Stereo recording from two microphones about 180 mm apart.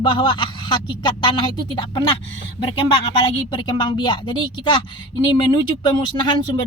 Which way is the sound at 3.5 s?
30° left (ahead or behind).